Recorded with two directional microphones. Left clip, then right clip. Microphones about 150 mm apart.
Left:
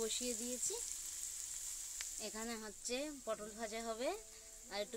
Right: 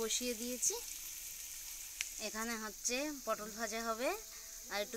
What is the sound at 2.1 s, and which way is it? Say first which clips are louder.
Speech: right 5 dB; 5° left (ahead or behind).